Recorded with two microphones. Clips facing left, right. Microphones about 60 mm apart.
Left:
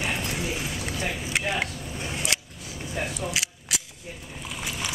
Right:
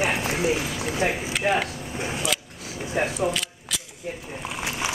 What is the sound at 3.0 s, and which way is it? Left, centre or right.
Speech, right.